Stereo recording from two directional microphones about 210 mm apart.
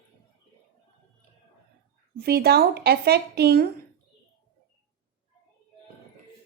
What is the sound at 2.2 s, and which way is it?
Speech, 50° right (ahead or behind).